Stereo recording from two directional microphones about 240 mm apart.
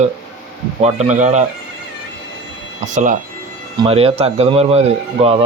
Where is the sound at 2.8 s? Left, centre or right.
Right.